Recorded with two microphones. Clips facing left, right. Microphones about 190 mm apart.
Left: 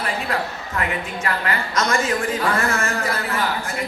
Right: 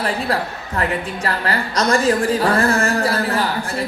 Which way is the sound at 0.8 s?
35° right (ahead or behind).